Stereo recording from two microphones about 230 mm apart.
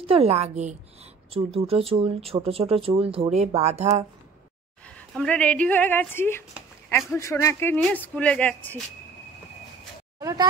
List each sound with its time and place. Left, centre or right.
0.0 s speech: right
4.9 s speech: centre
10.1 s speech: centre